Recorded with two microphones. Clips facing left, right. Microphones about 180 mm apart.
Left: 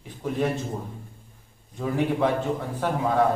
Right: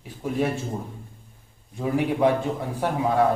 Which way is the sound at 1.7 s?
10° right (ahead or behind).